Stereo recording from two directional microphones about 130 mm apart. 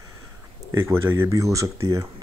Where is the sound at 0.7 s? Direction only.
20° right (ahead or behind).